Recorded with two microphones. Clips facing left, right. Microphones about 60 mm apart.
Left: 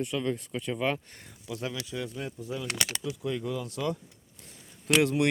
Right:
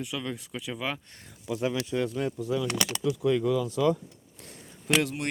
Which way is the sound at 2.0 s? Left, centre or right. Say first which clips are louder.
Right 7 dB; right.